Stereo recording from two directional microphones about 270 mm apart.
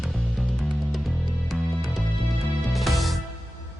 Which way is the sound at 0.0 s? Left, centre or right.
Centre.